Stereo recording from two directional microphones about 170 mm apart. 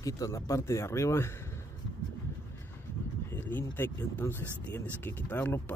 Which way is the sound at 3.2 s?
10° left (ahead or behind).